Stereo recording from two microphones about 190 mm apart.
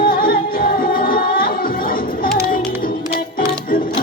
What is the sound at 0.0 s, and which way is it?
Music, 50° left (ahead or behind).